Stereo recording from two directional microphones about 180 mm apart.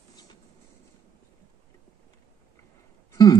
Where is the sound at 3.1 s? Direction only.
20° left (ahead or behind).